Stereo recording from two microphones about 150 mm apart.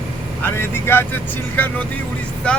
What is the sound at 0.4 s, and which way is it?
Speech, 15° left (ahead or behind).